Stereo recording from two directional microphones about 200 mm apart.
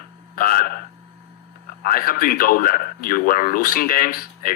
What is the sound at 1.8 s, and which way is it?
Speech, 45° left (ahead or behind).